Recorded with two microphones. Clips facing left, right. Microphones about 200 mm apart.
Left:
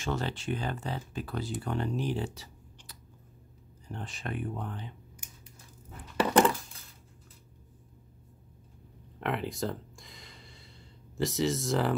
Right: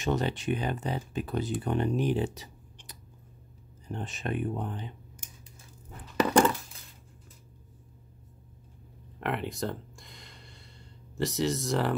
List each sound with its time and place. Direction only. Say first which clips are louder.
0.0 s speech: right 4 dB; 20° right (ahead or behind)
9.2 s gasp: even; centre (ahead or behind)